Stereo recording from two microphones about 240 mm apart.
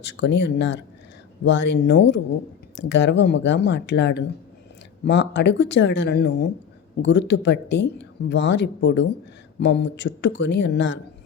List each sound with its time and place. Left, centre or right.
0.0 s speech: left